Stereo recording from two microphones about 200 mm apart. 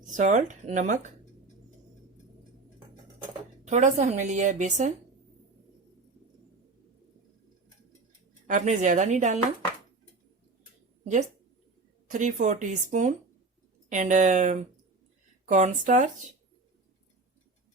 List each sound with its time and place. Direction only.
0.1 s a woman's voice: 40° right (ahead or behind)
3.6 s a woman's voice: 35° right (ahead or behind)
8.4 s a woman's voice: 40° right (ahead or behind)
11.0 s a woman's voice: 35° right (ahead or behind)